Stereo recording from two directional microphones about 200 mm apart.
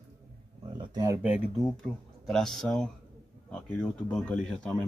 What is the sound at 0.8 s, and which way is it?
Speech, 20° right (ahead or behind).